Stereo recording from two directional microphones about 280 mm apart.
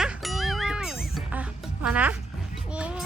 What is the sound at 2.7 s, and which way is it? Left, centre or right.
Music, centre.